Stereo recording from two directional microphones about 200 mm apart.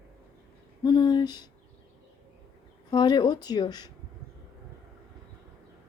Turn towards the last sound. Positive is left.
turn(degrees=20)  # may be behind; listen again after turning